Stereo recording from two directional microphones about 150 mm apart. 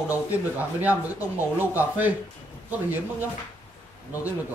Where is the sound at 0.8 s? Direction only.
10° right (ahead or behind).